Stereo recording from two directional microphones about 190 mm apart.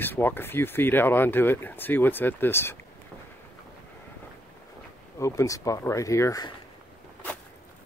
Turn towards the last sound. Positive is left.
turn(degrees=15)  # may be behind; listen again after turning